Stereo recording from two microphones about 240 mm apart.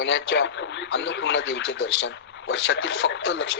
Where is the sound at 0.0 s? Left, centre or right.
Left.